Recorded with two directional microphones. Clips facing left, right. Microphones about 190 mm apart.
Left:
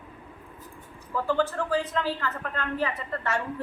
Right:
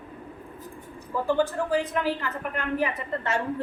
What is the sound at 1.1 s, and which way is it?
A woman's voice, 15° right (ahead or behind).